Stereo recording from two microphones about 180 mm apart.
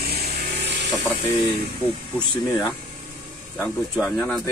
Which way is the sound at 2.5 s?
10° left (ahead or behind).